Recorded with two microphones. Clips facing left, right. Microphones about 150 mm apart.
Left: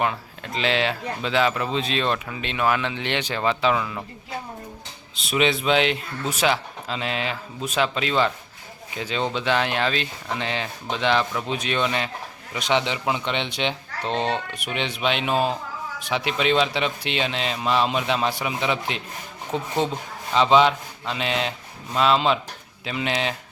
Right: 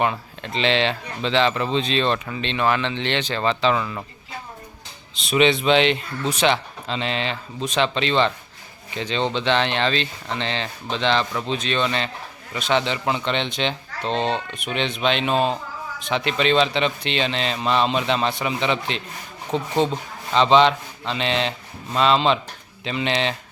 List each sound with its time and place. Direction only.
0.0 s speech: centre (ahead or behind)
5.1 s speech: 5° left (ahead or behind)
19.5 s speech: 20° right (ahead or behind)
20.3 s speech: 10° left (ahead or behind)